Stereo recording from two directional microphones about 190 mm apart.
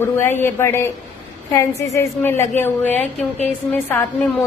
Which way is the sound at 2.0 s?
10° left (ahead or behind).